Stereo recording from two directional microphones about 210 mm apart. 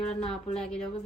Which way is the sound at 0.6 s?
5° left (ahead or behind).